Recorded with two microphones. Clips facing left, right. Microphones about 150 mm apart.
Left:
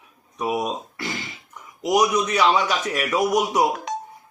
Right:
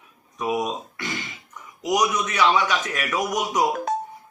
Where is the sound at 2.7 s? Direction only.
5° left (ahead or behind).